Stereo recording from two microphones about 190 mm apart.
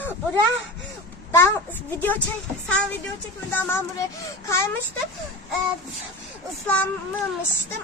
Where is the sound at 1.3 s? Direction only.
15° left (ahead or behind).